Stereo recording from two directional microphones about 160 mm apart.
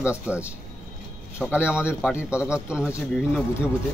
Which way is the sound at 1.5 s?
5° right (ahead or behind).